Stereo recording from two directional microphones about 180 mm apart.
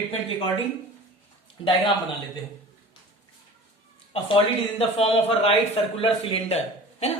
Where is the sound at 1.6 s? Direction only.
30° left (ahead or behind).